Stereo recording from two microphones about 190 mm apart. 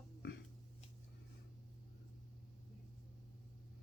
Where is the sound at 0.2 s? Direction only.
65° left (ahead or behind).